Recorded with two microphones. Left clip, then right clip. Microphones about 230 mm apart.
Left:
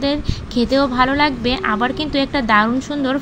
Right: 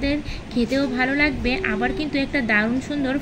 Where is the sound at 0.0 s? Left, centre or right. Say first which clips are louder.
Left 4 dB; centre.